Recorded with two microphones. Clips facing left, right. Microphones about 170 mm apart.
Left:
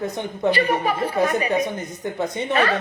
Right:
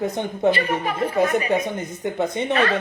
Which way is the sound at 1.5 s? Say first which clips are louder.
Left 1 dB; 25° right (ahead or behind).